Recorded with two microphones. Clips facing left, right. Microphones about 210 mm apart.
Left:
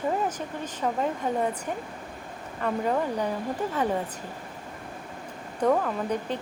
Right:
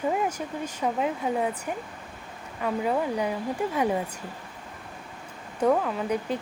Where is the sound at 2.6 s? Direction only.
5° right (ahead or behind).